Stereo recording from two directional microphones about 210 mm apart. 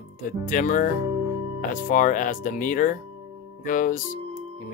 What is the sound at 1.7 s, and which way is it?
Speech, 40° left (ahead or behind).